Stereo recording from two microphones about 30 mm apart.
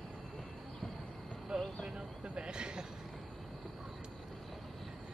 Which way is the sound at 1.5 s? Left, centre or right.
Right.